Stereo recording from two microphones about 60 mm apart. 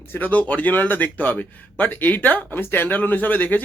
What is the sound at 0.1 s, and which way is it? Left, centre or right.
Speech, left.